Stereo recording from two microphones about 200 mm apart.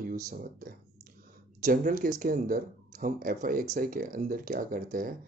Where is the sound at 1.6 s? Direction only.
45° right (ahead or behind).